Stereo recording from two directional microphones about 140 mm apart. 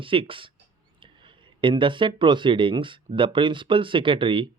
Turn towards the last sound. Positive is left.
turn(degrees=-35)  # may be behind; listen again after turning